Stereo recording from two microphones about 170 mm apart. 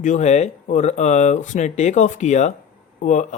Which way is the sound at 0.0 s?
45° left (ahead or behind).